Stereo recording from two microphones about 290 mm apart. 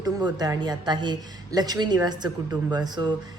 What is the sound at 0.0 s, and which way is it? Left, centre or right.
A woman's voice, centre.